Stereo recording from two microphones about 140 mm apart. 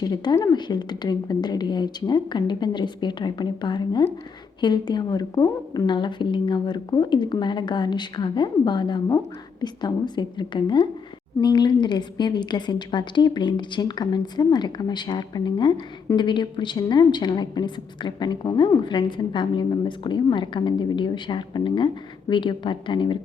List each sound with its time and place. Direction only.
0.0 s a woman's voice: 30° left (ahead or behind)